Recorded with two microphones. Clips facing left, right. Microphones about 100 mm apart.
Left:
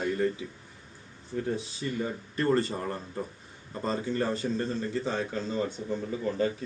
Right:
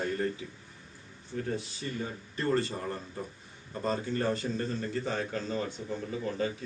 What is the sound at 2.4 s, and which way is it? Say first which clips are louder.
A man's voice: left 3 dB; 20° left (ahead or behind).